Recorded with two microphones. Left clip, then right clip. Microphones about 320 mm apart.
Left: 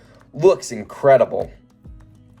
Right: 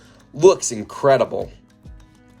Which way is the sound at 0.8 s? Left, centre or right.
Right.